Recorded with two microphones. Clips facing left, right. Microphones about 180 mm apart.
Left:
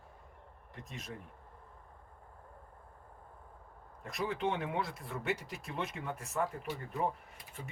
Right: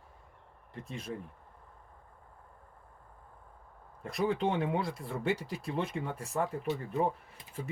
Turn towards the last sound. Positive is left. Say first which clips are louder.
# right 4 dB
turn(degrees=-25)  # may be behind; listen again after turning